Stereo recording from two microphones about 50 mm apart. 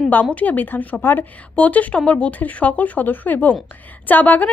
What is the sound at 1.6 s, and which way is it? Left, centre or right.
A woman's voice, left.